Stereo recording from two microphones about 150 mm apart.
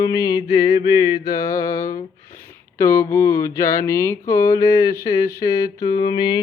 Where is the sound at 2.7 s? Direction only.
15° left (ahead or behind).